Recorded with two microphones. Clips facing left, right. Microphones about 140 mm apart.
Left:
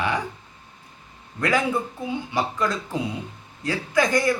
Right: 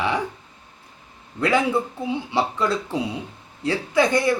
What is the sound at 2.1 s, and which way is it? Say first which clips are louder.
Speech: right 3 dB; 30° right (ahead or behind).